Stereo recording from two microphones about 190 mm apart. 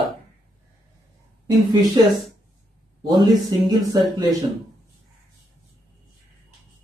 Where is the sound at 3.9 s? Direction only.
20° right (ahead or behind).